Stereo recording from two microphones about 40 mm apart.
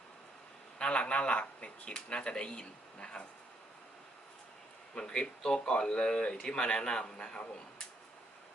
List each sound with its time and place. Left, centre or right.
0.8 s a man's voice: left
4.9 s speech: left